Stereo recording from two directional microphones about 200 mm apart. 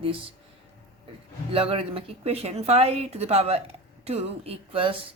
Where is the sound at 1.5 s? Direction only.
30° right (ahead or behind).